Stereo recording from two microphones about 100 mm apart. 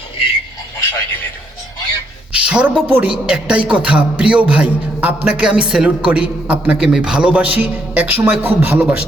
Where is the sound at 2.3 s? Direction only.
10° right (ahead or behind).